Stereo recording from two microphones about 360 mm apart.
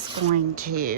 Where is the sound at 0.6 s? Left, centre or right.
Right.